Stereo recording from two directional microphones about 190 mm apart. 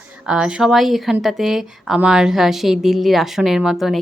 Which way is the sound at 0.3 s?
5° right (ahead or behind).